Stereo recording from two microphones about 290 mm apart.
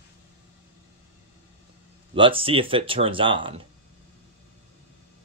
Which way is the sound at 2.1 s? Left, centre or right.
Centre.